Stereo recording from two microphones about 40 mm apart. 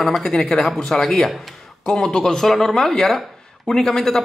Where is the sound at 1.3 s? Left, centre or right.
Centre.